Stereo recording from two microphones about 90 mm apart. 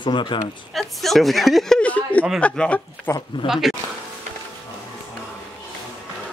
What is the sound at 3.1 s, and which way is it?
Speech, 30° left (ahead or behind).